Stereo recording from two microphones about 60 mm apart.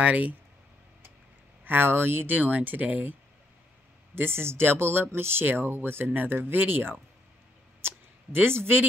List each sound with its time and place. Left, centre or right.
0.0 s speech: right
1.6 s speech: right